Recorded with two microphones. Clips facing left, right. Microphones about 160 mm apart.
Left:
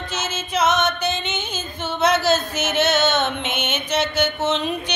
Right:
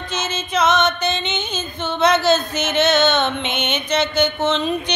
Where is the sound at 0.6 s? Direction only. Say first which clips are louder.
Right 2 dB; 10° left (ahead or behind).